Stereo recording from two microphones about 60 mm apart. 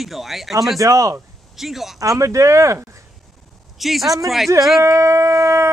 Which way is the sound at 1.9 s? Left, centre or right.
Right.